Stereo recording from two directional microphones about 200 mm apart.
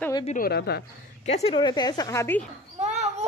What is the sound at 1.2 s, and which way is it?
A woman's voice, 30° left (ahead or behind).